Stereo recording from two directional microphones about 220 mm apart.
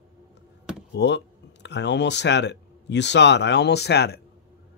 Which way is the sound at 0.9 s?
50° left (ahead or behind).